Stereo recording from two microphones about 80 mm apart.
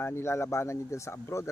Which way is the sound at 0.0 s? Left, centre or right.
Left.